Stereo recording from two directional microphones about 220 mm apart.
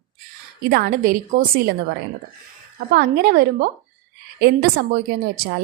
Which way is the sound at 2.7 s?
45° right (ahead or behind).